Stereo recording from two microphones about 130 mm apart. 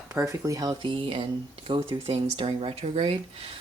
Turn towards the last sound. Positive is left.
turn(degrees=-45)  # may be behind; listen again after turning